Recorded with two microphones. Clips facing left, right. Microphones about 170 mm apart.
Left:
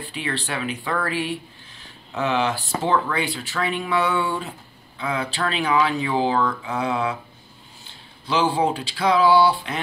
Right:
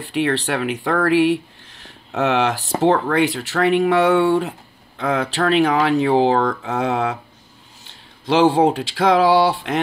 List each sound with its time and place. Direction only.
0.1 s speech: 75° right (ahead or behind)
5.5 s speech: 70° right (ahead or behind)
8.3 s speech: 75° right (ahead or behind)